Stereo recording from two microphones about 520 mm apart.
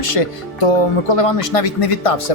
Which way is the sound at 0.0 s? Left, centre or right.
Left.